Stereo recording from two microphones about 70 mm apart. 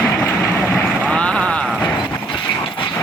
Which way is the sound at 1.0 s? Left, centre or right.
Centre.